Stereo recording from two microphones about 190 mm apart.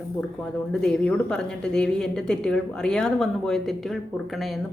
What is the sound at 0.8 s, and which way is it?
A woman's voice, 5° left (ahead or behind).